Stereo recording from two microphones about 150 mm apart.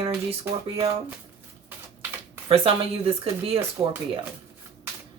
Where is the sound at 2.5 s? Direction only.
40° right (ahead or behind).